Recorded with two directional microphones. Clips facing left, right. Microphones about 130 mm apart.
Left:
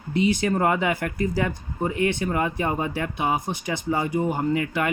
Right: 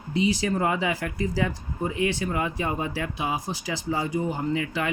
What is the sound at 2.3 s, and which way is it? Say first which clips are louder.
Speech: left 3 dB; 35° left (ahead or behind).